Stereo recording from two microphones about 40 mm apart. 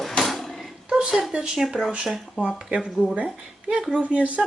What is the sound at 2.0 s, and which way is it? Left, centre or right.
Cutlery, centre.